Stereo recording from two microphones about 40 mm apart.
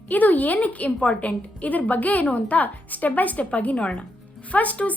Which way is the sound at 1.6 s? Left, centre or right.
Left.